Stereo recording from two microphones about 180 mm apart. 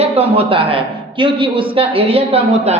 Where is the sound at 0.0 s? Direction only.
35° right (ahead or behind).